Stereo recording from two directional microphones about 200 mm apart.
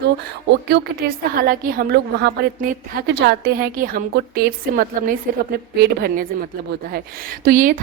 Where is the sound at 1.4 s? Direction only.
45° right (ahead or behind).